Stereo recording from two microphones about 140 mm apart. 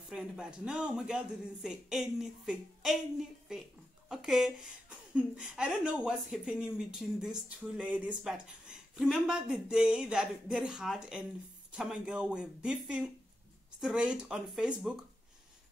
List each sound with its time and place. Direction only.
0.1 s a woman's voice: 5° right (ahead or behind)